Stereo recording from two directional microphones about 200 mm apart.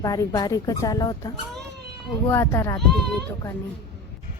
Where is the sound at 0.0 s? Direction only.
20° left (ahead or behind).